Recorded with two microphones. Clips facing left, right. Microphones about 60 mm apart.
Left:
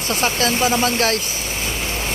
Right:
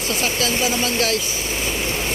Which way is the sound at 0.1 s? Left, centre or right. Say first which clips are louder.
Left 3 dB; left.